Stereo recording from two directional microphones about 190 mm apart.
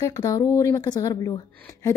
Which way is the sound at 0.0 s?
20° left (ahead or behind).